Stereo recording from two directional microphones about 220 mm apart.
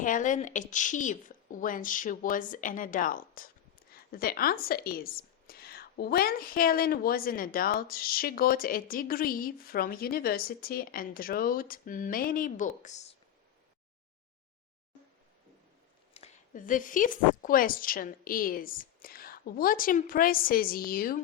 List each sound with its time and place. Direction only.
0.0 s a woman's voice: 35° left (ahead or behind)
16.1 s a woman's voice: 30° left (ahead or behind)